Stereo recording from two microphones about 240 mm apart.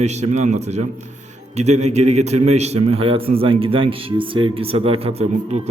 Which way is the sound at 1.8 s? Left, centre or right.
Right.